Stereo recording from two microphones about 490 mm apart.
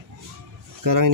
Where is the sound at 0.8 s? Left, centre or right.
Right.